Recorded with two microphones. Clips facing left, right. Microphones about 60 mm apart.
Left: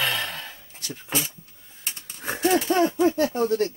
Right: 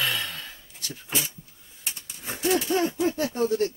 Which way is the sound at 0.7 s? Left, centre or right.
Left.